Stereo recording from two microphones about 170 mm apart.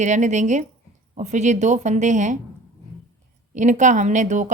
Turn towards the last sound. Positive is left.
turn(degrees=-45)  # may be behind; listen again after turning